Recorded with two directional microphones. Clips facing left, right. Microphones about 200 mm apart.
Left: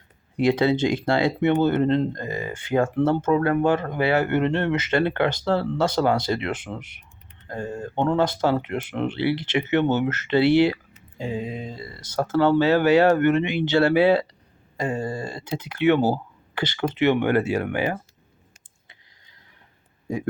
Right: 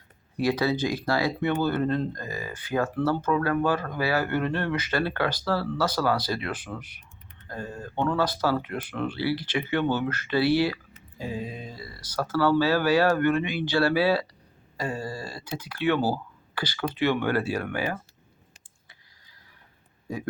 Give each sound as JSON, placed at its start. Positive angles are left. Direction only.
{"t": 0.3, "sound": "speech", "side_deg": 25}